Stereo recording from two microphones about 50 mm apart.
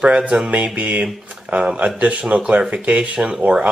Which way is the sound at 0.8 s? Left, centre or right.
Right.